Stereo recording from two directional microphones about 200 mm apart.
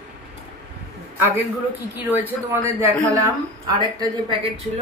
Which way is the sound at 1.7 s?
10° right (ahead or behind).